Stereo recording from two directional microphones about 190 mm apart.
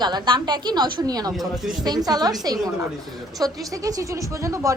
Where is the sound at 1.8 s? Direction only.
20° right (ahead or behind).